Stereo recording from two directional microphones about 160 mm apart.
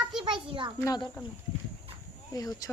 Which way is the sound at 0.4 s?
30° right (ahead or behind).